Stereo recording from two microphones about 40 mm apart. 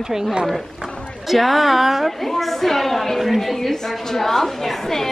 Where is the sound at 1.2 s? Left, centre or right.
Centre.